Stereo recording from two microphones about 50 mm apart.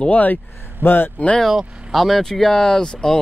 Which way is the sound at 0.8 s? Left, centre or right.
Left.